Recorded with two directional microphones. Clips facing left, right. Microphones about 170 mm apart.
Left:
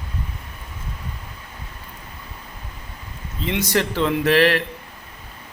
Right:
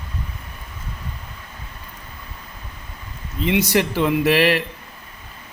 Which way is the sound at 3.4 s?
10° right (ahead or behind).